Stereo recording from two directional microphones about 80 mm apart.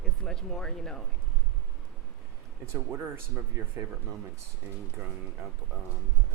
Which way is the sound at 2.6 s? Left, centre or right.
Right.